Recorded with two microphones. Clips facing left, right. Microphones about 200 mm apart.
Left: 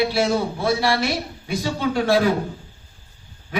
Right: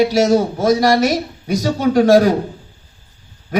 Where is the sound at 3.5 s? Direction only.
40° right (ahead or behind).